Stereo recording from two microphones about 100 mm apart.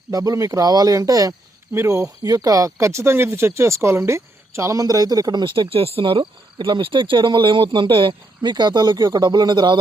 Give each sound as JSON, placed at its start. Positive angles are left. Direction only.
{"t": 0.1, "sound": "speech", "side_deg": -35}
{"t": 5.6, "sound": "speech", "side_deg": -70}